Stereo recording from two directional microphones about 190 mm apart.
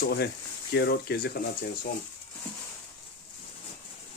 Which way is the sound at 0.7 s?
60° left (ahead or behind).